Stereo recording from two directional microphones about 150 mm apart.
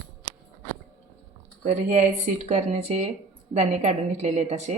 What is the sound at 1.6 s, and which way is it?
Speech, 55° right (ahead or behind).